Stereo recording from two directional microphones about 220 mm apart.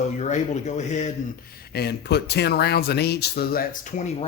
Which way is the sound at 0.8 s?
35° left (ahead or behind).